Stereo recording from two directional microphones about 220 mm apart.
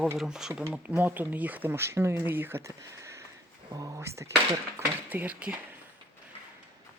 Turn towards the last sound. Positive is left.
turn(degrees=-5)  # may be behind; listen again after turning